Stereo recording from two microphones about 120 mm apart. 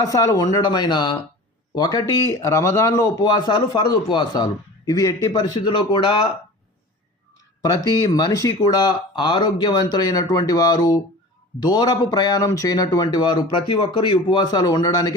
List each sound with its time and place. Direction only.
0.0 s speech: 30° left (ahead or behind)
7.6 s speech: 30° left (ahead or behind)